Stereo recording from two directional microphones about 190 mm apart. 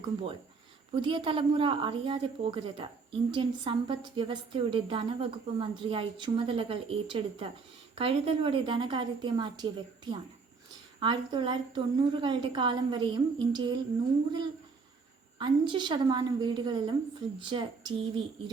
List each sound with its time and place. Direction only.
0.9 s a woman's voice: 25° right (ahead or behind)
15.4 s a woman's voice: 25° right (ahead or behind)